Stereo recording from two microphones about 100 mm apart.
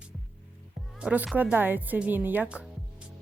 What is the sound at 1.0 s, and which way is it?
Speech, 10° right (ahead or behind).